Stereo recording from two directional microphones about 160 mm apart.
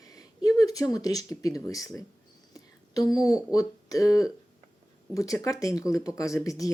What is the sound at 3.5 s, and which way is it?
Speech, 20° left (ahead or behind).